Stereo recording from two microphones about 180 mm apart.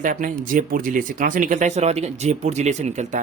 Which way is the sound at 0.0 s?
50° right (ahead or behind).